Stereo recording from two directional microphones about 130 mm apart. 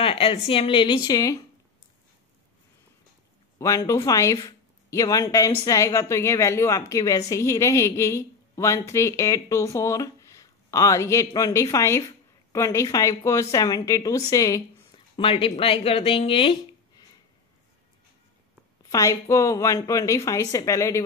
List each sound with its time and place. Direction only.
0.0 s a sound: 45° left (ahead or behind)
0.5 s a woman's voice: 45° left (ahead or behind); by 1.4 s 25° left (ahead or behind)
3.5 s a woman's voice: 25° left (ahead or behind)
14.9 s speech: 45° left (ahead or behind)
18.9 s a woman's voice: 25° left (ahead or behind)